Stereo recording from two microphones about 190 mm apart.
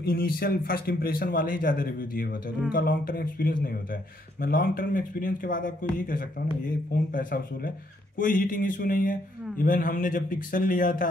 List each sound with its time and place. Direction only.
0.0 s speech: 50° left (ahead or behind)